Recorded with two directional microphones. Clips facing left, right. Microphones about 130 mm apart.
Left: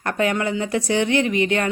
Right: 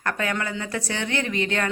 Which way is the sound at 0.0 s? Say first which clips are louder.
Left 5 dB; 20° left (ahead or behind).